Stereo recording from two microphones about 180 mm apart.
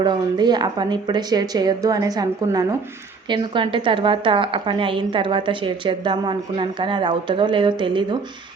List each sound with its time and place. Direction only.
0.0 s a woman's voice: 25° right (ahead or behind)